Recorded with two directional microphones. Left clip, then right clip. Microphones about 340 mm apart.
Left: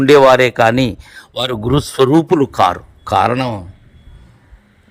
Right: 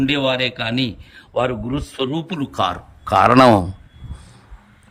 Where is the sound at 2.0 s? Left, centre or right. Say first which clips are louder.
Left 13 dB; left.